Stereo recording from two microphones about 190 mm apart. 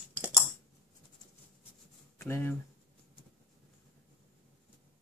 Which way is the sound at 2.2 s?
15° left (ahead or behind).